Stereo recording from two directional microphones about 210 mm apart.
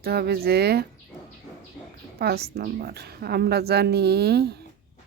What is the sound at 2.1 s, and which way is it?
Speech, 50° right (ahead or behind).